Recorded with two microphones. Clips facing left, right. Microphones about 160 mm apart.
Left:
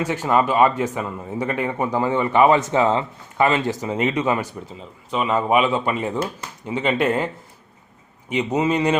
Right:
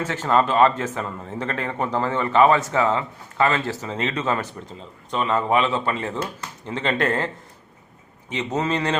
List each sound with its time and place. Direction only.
0.0 s a man's voice: 10° left (ahead or behind)
8.3 s a man's voice: 10° left (ahead or behind)